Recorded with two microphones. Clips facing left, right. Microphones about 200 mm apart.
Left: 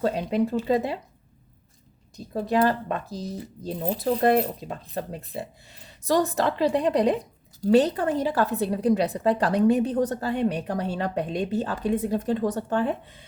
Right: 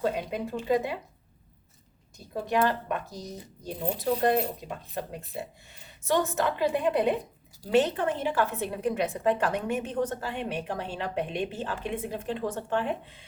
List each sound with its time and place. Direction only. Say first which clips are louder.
0.0 s a woman's voice: left 6 dB; 35° left (ahead or behind)
2.1 s a woman's voice: left 4 dB; 35° left (ahead or behind)
6.1 s a woman's voice: left 4 dB; 35° left (ahead or behind)